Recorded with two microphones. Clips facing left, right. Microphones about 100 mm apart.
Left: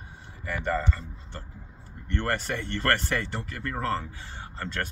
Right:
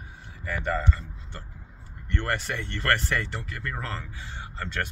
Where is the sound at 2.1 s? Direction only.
35° left (ahead or behind).